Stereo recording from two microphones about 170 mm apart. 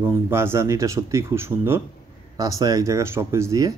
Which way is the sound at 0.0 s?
15° right (ahead or behind).